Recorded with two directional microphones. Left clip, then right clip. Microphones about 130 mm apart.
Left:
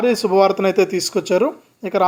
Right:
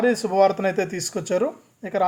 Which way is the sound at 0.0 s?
15° left (ahead or behind).